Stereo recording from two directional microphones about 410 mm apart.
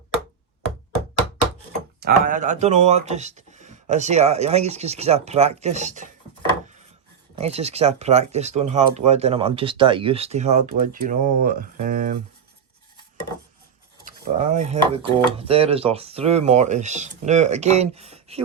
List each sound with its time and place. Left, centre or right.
2.0 s speech: right
7.3 s speech: centre
14.0 s speech: centre